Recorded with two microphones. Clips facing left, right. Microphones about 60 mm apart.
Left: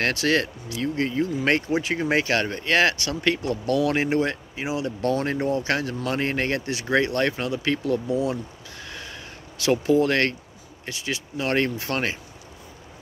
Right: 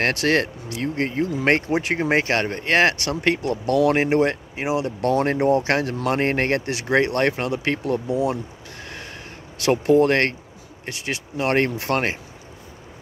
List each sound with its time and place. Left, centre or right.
0.0 s speech: right
1.7 s speech: right
2.0 s speech: right
5.2 s speech: right
5.6 s speech: right
8.8 s a sound: right
10.9 s speech: right